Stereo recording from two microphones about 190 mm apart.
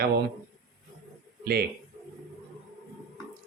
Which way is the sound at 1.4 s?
55° right (ahead or behind).